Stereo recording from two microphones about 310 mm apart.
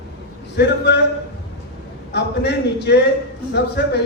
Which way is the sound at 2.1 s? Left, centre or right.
Left.